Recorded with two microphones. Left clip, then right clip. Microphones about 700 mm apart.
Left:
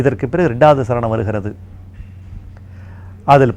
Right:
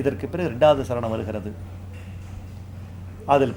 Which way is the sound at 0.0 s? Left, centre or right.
Left.